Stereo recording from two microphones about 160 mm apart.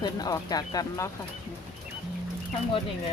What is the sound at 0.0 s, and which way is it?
Speech, 25° left (ahead or behind).